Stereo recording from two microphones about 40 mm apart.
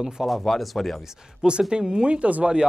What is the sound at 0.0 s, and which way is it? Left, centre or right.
Speech, centre.